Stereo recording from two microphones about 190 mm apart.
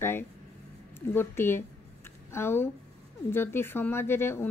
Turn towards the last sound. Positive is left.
turn(degrees=10)  # may be behind; listen again after turning